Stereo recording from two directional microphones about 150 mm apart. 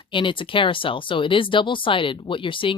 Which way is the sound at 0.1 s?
35° left (ahead or behind).